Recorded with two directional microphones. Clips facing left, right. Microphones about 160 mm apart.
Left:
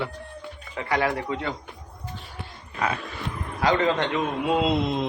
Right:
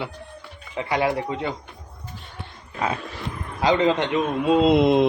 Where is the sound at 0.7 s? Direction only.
20° right (ahead or behind).